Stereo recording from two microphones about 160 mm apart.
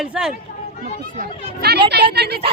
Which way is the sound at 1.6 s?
90° right.